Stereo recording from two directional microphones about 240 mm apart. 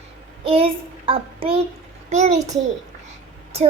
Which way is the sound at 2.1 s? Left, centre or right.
Right.